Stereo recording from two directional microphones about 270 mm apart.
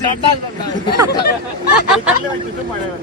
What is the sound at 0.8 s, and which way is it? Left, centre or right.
Speech, centre.